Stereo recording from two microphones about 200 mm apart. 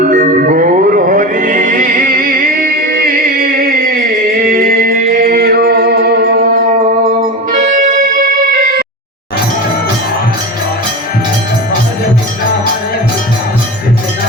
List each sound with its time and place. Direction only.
0.0 s music: 45° right (ahead or behind)